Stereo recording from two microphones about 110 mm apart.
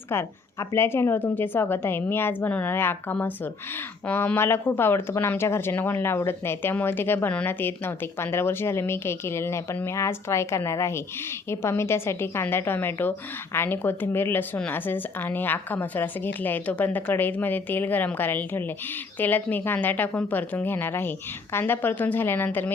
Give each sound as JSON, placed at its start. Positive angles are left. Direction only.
{"t": 0.1, "sound": "a woman's voice", "side_deg": 25}